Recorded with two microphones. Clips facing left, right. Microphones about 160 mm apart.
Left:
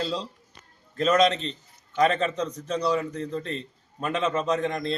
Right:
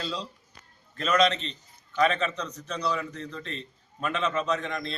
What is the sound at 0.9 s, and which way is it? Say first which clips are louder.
A man's voice: left 3 dB; 35° left (ahead or behind).